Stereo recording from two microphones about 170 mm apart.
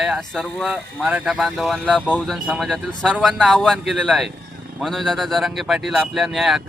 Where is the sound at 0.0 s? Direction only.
Centre (ahead or behind).